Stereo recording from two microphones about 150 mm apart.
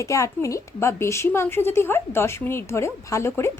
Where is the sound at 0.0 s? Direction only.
20° left (ahead or behind).